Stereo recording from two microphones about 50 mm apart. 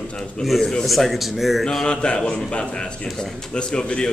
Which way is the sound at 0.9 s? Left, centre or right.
Centre.